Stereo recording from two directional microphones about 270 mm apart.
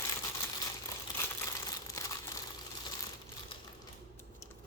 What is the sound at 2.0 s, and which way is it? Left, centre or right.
Crumpling, centre.